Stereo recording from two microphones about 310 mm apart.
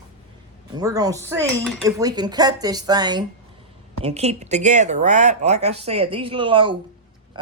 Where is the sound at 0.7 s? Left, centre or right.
Centre.